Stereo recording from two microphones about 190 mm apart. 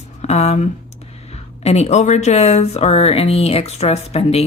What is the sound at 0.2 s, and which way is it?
Speech, 35° left (ahead or behind).